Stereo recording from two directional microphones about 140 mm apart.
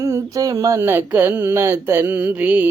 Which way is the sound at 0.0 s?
25° right (ahead or behind).